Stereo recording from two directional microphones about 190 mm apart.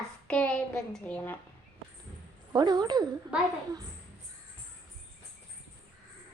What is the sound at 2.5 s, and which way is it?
Speech, 20° right (ahead or behind).